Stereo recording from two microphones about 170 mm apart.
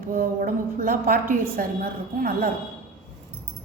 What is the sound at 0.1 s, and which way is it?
A woman's voice, 55° right (ahead or behind).